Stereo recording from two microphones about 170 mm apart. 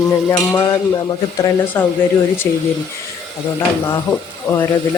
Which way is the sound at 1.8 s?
15° left (ahead or behind).